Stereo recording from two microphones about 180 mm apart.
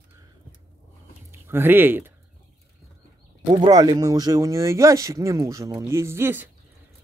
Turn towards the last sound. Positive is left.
turn(degrees=-15)  # may be behind; listen again after turning